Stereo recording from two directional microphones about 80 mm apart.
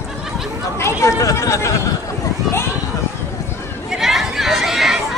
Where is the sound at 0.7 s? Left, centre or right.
Left.